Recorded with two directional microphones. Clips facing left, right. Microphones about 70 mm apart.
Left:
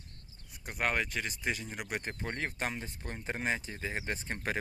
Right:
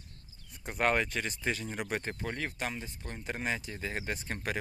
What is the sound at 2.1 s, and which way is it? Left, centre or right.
Speech, left.